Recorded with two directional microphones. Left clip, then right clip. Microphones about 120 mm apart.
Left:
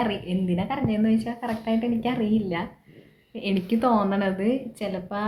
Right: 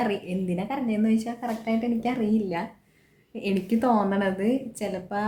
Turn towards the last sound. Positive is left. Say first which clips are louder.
# even
turn(degrees=-30)  # may be behind; listen again after turning